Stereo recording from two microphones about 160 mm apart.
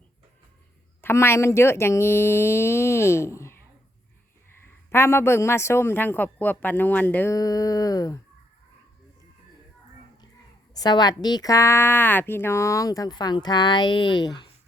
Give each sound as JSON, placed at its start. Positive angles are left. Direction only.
{"t": 1.0, "sound": "speech", "side_deg": 15}
{"t": 4.9, "sound": "speech", "side_deg": 15}
{"t": 7.3, "sound": "speech", "side_deg": 25}
{"t": 10.8, "sound": "a woman's voice", "side_deg": 25}